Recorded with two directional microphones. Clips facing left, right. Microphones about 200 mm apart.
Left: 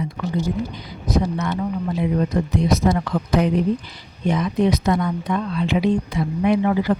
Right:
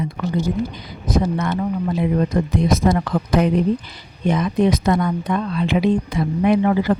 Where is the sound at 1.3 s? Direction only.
50° right (ahead or behind).